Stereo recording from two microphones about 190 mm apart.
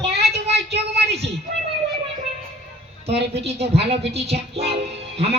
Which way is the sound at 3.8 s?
30° right (ahead or behind).